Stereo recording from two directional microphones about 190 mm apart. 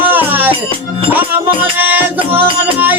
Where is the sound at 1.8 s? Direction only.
10° right (ahead or behind).